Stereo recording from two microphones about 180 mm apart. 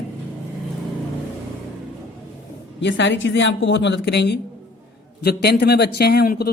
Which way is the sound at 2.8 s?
80° left.